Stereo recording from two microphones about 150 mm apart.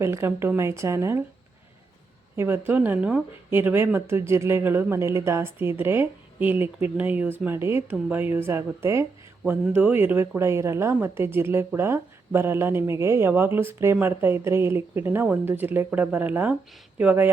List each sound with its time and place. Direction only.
0.0 s speech: 20° right (ahead or behind)
2.3 s speech: 15° right (ahead or behind)